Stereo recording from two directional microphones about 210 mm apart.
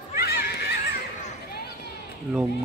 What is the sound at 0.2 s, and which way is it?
Neigh, 45° left (ahead or behind).